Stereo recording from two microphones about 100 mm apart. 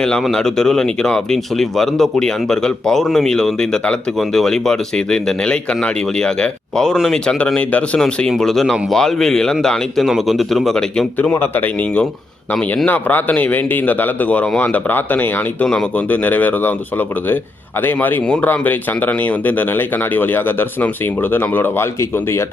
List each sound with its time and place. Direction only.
0.0 s speech: 5° left (ahead or behind)
11.3 s a man's voice: 20° left (ahead or behind)
17.8 s speech: 20° left (ahead or behind)